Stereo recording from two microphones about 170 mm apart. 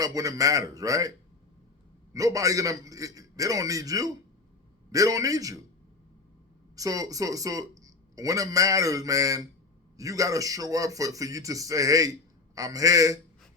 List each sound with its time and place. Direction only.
0.0 s speech: 20° right (ahead or behind)
2.1 s speech: 20° right (ahead or behind)
6.7 s speech: 20° right (ahead or behind)